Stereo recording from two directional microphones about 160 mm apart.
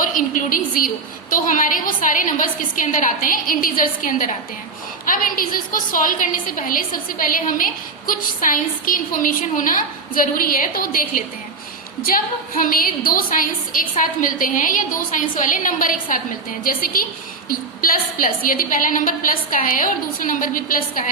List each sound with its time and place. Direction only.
0.0 s a woman's voice: 55° left (ahead or behind)